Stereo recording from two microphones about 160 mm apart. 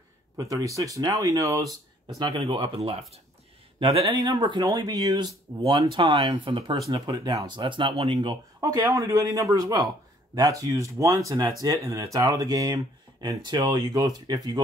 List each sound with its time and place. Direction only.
0.4 s speech: 20° right (ahead or behind); by 3.2 s 40° right (ahead or behind)
3.8 s speech: 30° right (ahead or behind)